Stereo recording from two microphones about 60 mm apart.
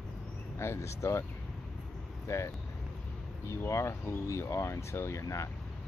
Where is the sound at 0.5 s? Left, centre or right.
Left.